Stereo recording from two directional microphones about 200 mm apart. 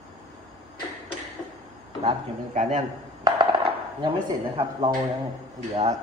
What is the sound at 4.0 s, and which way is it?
Speech, 20° right (ahead or behind).